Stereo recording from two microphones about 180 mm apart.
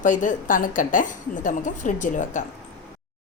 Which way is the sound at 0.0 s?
45° left (ahead or behind).